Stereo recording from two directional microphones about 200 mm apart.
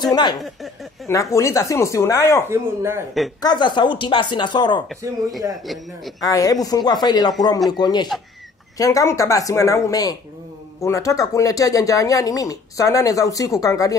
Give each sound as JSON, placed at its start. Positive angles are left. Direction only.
{"t": 0.0, "sound": "speech", "side_deg": 20}
{"t": 2.5, "sound": "a man's voice", "side_deg": -15}
{"t": 3.4, "sound": "speech", "side_deg": 20}
{"t": 5.5, "sound": "a man's voice", "side_deg": 0}
{"t": 6.2, "sound": "speech", "side_deg": 15}